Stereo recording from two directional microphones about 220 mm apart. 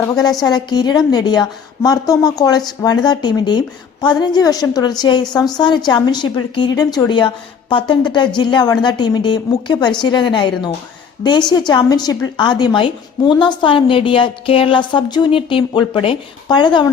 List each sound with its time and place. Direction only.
0.4 s a woman's voice: 15° left (ahead or behind)